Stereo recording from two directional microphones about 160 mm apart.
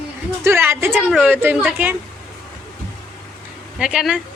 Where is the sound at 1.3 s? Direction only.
10° right (ahead or behind).